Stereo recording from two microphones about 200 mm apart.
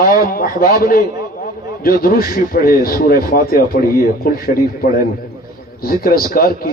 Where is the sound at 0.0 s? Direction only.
45° left (ahead or behind).